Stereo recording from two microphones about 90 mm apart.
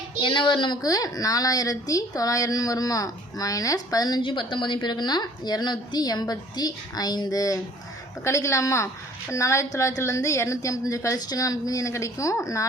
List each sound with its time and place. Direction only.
0.2 s a woman's voice: 65° left (ahead or behind); by 4.2 s 45° left (ahead or behind)
4.2 s a woman's voice: 70° left (ahead or behind); by 12.6 s 35° left (ahead or behind)